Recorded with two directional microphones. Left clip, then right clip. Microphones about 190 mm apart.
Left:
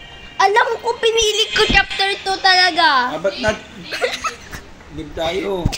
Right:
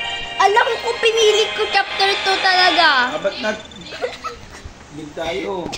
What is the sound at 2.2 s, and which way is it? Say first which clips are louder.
Speech: right 4 dB; 40° right (ahead or behind).